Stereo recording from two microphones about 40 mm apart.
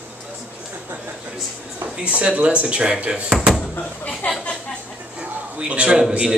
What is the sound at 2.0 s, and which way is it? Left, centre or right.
Speech, right.